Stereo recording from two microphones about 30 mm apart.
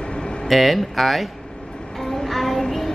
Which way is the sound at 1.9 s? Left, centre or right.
Centre.